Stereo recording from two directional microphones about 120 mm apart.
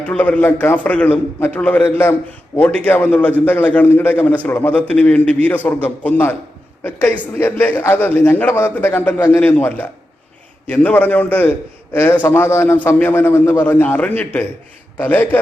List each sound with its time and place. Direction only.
0.0 s a man's voice: 10° left (ahead or behind)